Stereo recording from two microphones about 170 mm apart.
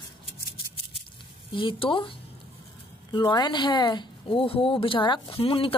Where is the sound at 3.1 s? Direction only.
25° left (ahead or behind).